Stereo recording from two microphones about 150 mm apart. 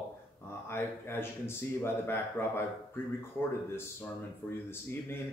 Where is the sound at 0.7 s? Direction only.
15° left (ahead or behind).